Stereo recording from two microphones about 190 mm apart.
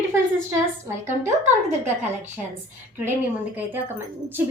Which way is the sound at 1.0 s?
10° right (ahead or behind).